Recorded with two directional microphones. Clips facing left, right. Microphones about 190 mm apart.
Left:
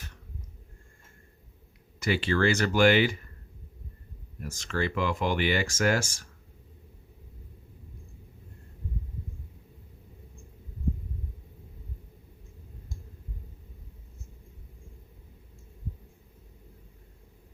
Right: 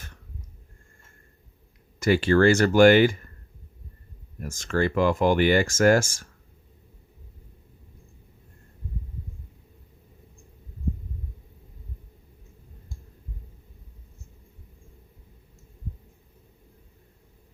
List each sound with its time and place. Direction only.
2.0 s speech: 45° right (ahead or behind)
4.4 s speech: 50° right (ahead or behind)